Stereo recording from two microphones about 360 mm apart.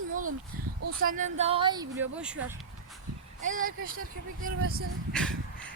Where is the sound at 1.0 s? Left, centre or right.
Right; by 2.4 s centre.